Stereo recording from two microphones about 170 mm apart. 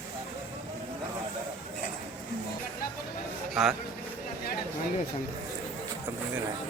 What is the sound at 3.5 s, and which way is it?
Speech, centre (ahead or behind).